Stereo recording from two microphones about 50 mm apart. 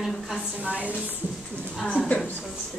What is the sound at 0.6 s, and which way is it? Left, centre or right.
Speech, right.